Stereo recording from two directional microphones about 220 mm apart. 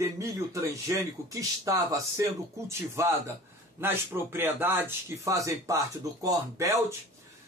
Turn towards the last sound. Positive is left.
turn(degrees=-15)  # may be behind; listen again after turning